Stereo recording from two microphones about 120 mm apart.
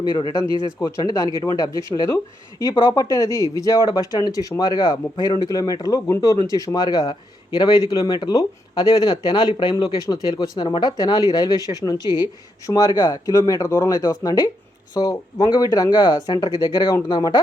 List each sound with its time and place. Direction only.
0.0 s speech: 35° left (ahead or behind)